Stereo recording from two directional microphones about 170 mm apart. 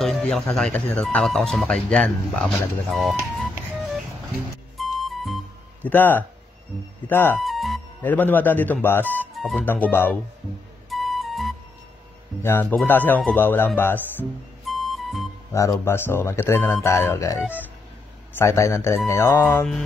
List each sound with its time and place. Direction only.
0.0 s speech: 5° left (ahead or behind)
4.7 s music: centre (ahead or behind)
5.9 s speech: 10° left (ahead or behind)
7.3 s music: centre (ahead or behind)
8.0 s speech: 10° left (ahead or behind)
10.9 s music: centre (ahead or behind)
12.4 s speech: 15° left (ahead or behind)
14.7 s music: centre (ahead or behind)
15.5 s speech: 20° left (ahead or behind)